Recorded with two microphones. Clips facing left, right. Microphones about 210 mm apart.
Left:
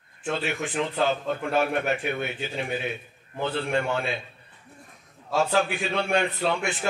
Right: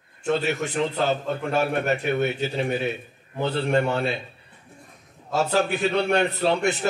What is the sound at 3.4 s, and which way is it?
Speech, 40° right (ahead or behind).